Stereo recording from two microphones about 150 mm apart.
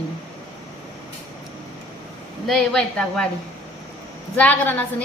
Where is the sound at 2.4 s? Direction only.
5° left (ahead or behind).